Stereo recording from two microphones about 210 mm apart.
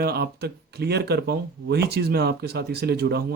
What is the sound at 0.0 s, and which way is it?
Speech, 50° right (ahead or behind).